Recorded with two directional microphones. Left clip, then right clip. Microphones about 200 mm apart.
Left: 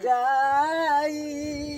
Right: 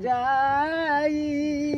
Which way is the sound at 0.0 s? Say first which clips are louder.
Left 1 dB; 50° left (ahead or behind).